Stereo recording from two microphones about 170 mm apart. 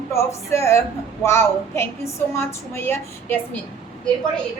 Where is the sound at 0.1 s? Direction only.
15° left (ahead or behind).